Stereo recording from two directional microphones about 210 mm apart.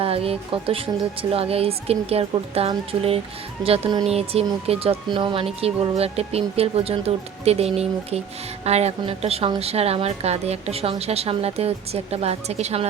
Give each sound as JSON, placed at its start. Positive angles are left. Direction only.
{"t": 0.0, "sound": "a woman's voice", "side_deg": -25}